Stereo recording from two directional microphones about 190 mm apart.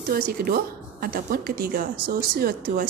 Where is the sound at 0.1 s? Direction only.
50° right (ahead or behind).